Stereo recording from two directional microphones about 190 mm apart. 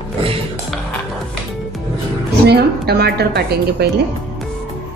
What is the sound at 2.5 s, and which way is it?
A woman's voice, 55° right (ahead or behind).